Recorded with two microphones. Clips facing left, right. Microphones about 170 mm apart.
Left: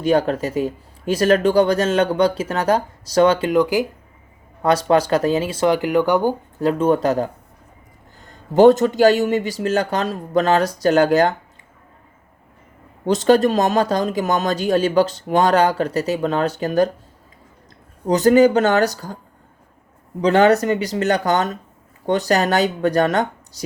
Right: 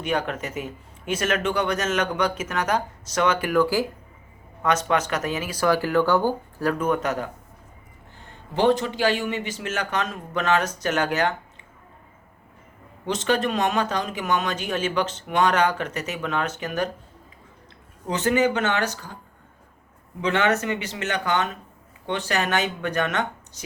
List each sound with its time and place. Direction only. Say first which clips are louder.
0.0 s speech: left 9 dB; 35° left (ahead or behind); by 3.8 s 20° left (ahead or behind)
4.6 s speech: left 7 dB; 35° left (ahead or behind)
13.1 s speech: left 9 dB; 40° left (ahead or behind)
18.0 s speech: left 9 dB; 35° left (ahead or behind)
20.2 s speech: left 8 dB; 35° left (ahead or behind)